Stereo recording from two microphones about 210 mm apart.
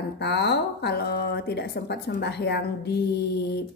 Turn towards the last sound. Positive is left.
turn(degrees=50)  # may be behind; listen again after turning